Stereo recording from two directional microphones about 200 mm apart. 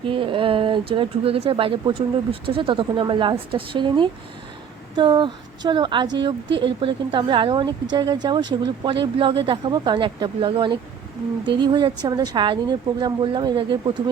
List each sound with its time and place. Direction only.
0.0 s speech: 25° right (ahead or behind)